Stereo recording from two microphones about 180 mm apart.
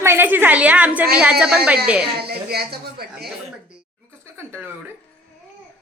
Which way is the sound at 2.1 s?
60° right (ahead or behind).